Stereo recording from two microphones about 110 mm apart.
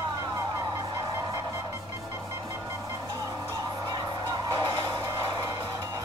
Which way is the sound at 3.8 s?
40° right (ahead or behind).